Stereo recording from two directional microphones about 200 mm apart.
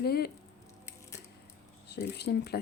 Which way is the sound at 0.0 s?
50° left (ahead or behind).